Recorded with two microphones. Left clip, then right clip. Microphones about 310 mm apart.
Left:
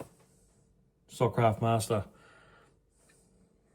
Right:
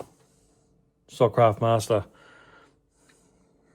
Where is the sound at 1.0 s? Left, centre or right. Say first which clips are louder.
Right 8 dB; right.